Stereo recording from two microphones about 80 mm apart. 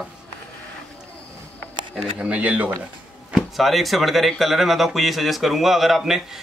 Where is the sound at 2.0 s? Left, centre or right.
Centre.